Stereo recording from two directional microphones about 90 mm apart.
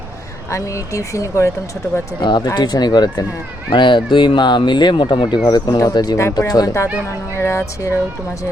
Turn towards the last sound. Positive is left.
turn(degrees=30)  # may be behind; listen again after turning